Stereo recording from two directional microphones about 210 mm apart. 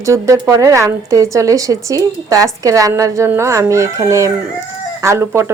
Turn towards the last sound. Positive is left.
turn(degrees=-10)  # may be behind; listen again after turning